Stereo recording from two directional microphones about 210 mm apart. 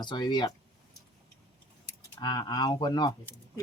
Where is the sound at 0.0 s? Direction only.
20° left (ahead or behind).